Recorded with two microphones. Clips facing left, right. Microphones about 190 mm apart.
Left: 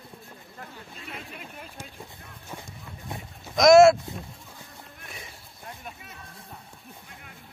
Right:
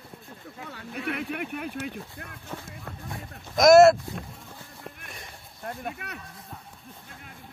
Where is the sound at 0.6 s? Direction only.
70° right (ahead or behind).